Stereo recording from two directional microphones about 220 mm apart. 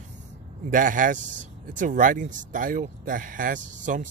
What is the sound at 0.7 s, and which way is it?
Speech, 35° right (ahead or behind).